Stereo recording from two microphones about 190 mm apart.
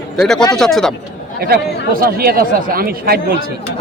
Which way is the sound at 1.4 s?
50° right (ahead or behind).